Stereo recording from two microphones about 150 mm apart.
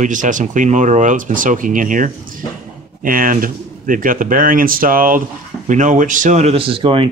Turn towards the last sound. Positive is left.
turn(degrees=-35)  # may be behind; listen again after turning